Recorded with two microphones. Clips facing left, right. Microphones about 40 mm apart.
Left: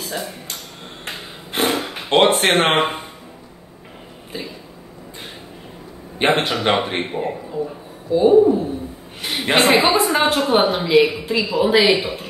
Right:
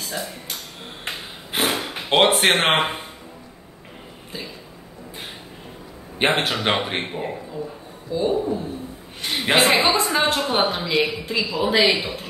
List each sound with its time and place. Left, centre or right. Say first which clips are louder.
0.0 s speech: left 2 dB; centre
1.5 s a sound: left 3 dB; centre
2.5 s speech: left 3 dB; centre
6.5 s speech: left 3 dB; centre
7.5 s speech: left 6 dB; centre
9.2 s a man's voice: left 2 dB; centre